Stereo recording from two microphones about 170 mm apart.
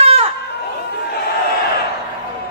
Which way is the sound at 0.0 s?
35° right (ahead or behind).